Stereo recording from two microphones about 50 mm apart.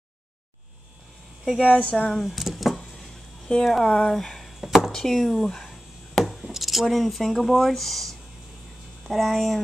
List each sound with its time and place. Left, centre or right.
1.4 s speech: centre
1.7 s speech: left
2.0 s speech: centre
4.9 s a sound: centre
6.4 s speech: centre